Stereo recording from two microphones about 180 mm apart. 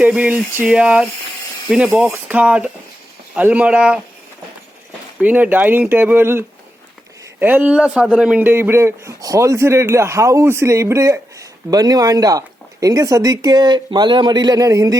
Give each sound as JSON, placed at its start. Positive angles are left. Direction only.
{"t": 0.0, "sound": "speech", "side_deg": -5}
{"t": 5.2, "sound": "speech", "side_deg": -10}